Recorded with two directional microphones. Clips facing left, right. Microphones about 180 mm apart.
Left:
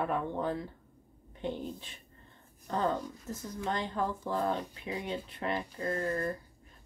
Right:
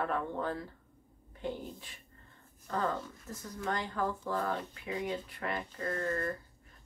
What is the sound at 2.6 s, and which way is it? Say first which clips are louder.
Speech: left 3 dB; 20° left (ahead or behind).